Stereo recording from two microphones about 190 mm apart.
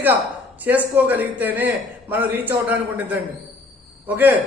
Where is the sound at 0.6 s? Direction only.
10° right (ahead or behind).